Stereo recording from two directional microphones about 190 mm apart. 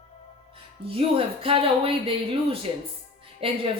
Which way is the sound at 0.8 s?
30° right (ahead or behind).